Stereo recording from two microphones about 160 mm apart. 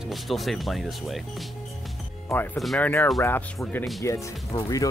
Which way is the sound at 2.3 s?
10° left (ahead or behind).